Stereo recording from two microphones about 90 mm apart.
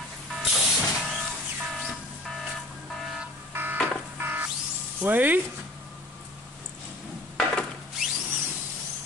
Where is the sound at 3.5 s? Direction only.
25° right (ahead or behind).